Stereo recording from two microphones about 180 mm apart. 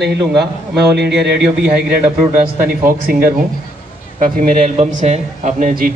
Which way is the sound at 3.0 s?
50° right (ahead or behind).